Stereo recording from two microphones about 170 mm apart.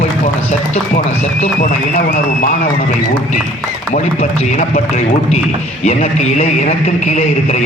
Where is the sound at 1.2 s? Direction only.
40° left (ahead or behind).